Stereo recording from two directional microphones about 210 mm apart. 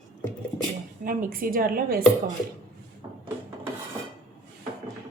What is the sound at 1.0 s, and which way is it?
A woman's voice, 40° right (ahead or behind).